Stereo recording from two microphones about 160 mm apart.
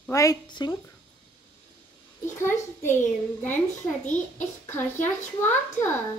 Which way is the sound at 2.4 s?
15° left (ahead or behind).